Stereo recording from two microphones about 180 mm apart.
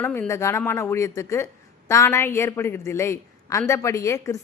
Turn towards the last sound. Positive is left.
turn(degrees=20)  # may be behind; listen again after turning